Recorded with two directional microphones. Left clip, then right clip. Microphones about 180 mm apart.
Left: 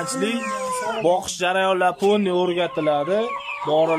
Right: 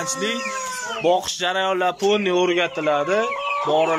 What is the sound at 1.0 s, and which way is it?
Speech, 15° left (ahead or behind).